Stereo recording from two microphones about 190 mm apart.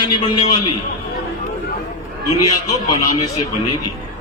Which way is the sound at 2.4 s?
20° left (ahead or behind).